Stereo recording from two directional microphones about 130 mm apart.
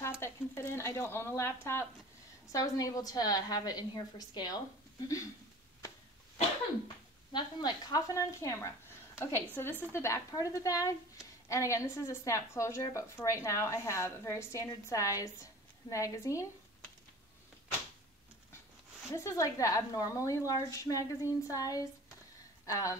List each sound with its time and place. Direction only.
0.2 s a woman's voice: 20° left (ahead or behind)
7.3 s a woman's voice: 30° left (ahead or behind)
19.1 s a woman's voice: 25° left (ahead or behind)